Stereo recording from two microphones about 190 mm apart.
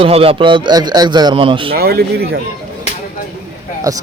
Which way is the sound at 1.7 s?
55° right (ahead or behind).